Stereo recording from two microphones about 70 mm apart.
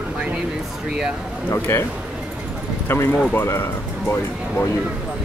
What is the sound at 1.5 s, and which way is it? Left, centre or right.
Speech, left.